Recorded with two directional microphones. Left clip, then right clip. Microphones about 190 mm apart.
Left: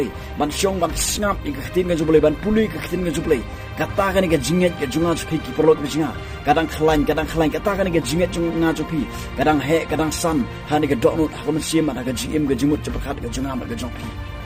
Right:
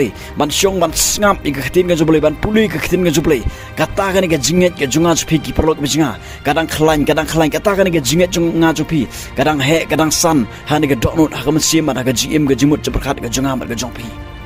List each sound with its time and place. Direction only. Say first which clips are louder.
0.3 s speech: right 6 dB; 60° right (ahead or behind)